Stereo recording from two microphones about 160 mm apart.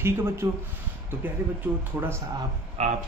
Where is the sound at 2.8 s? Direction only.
40° right (ahead or behind).